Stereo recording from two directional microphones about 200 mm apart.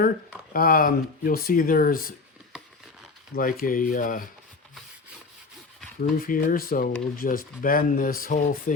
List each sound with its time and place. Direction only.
0.5 s speech: 45° left (ahead or behind)
3.3 s speech: 45° left (ahead or behind)
6.0 s speech: 45° left (ahead or behind)